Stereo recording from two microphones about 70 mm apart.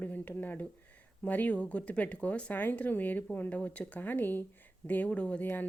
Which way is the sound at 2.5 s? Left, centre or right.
Left.